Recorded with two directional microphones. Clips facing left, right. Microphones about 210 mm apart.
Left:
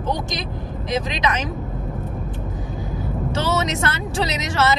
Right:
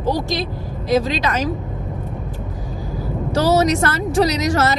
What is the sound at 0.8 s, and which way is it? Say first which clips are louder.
Speech: right 5 dB; 20° left (ahead or behind).